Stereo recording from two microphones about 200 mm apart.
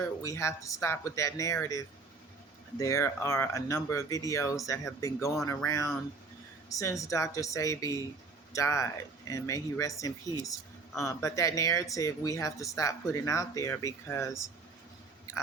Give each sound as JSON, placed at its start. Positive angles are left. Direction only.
{"t": 0.0, "sound": "speech", "side_deg": 15}
{"t": 2.7, "sound": "speech", "side_deg": 15}